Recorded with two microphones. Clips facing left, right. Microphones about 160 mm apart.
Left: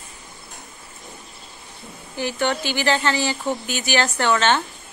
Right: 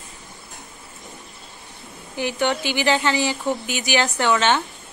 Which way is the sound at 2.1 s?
15° right (ahead or behind).